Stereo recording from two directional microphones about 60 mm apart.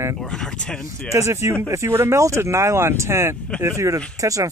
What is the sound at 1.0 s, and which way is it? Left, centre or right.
Speech, right.